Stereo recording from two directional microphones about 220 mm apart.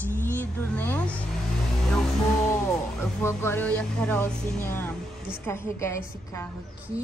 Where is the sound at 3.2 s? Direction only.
10° left (ahead or behind).